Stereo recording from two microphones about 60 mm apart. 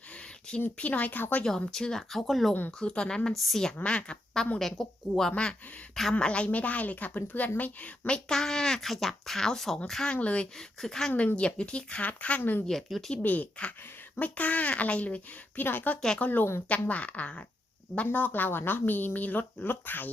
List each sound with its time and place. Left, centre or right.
0.1 s a sound: centre
0.8 s a woman's voice: left
1.5 s speech: centre
2.7 s speech: centre
3.3 s speech: centre
4.5 s speech: centre
5.4 s a woman's voice: centre
8.3 s speech: centre
11.3 s a woman's voice: centre
12.4 s speech: left
12.6 s speech: centre
13.2 s a woman's voice: left
16.0 s speech: centre
16.2 s a woman's voice: left